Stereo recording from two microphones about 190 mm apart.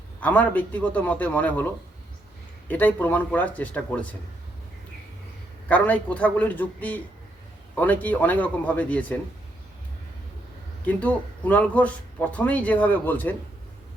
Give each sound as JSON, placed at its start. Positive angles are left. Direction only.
{"t": 0.2, "sound": "speech", "side_deg": 10}
{"t": 2.6, "sound": "speech", "side_deg": 10}
{"t": 5.6, "sound": "speech", "side_deg": 10}
{"t": 10.8, "sound": "speech", "side_deg": 10}